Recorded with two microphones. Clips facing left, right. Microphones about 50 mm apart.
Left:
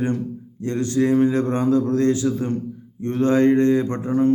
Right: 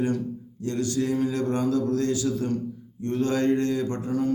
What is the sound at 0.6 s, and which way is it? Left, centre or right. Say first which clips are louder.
A man's voice: left 6 dB; left.